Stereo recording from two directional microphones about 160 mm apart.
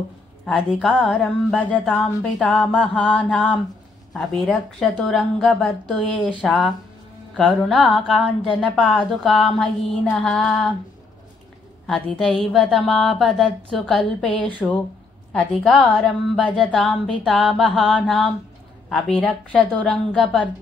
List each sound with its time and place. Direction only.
0.5 s a woman's voice: centre (ahead or behind)
11.8 s a woman's voice: 5° left (ahead or behind)